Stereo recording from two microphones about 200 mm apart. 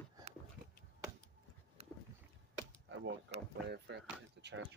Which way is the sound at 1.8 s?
30° right (ahead or behind).